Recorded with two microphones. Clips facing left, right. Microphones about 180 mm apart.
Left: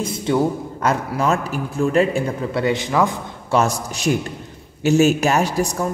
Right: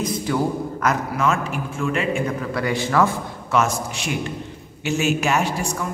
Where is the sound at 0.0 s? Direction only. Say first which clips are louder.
Left 2 dB; 25° left (ahead or behind).